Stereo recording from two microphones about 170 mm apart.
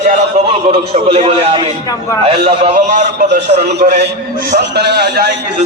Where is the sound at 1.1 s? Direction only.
35° right (ahead or behind).